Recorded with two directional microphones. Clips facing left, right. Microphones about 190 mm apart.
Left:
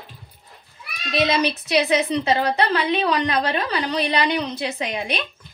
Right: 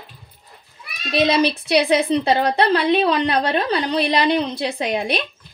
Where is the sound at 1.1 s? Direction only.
40° right (ahead or behind).